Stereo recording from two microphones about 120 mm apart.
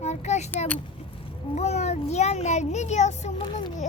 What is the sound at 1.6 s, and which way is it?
A child's voice, 65° left (ahead or behind).